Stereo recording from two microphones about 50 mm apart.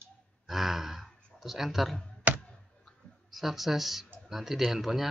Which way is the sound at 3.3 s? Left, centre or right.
Centre.